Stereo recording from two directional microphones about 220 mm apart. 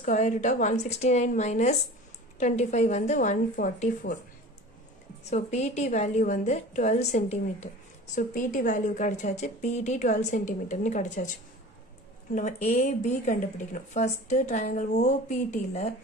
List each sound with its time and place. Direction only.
0.0 s a woman's voice: 35° left (ahead or behind)
5.3 s a woman's voice: 30° left (ahead or behind)
12.4 s a woman's voice: 30° left (ahead or behind)